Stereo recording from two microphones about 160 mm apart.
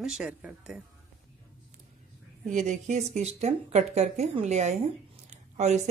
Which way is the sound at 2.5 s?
50° right (ahead or behind).